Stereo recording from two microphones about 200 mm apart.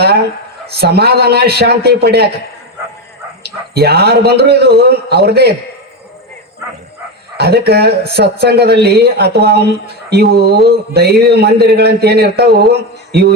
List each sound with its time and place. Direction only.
0.8 s a man's voice: 55° right (ahead or behind)
3.4 s a man's voice: 55° right (ahead or behind)
7.3 s a man's voice: 50° right (ahead or behind)
13.1 s a sound: 55° right (ahead or behind)